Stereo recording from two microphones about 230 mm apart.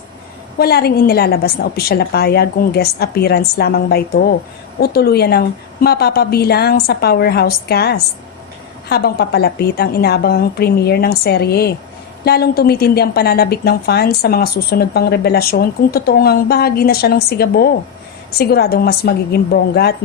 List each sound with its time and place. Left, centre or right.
0.6 s a woman's voice: left